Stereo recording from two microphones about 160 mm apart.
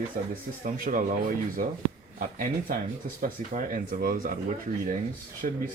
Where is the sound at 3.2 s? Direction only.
55° right (ahead or behind).